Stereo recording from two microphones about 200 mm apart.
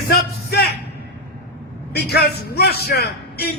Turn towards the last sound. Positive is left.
turn(degrees=50)  # may be behind; listen again after turning